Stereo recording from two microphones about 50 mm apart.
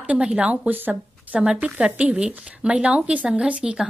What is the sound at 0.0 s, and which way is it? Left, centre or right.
Speech, right.